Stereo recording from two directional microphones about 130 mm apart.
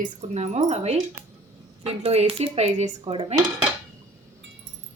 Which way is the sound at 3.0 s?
45° right (ahead or behind).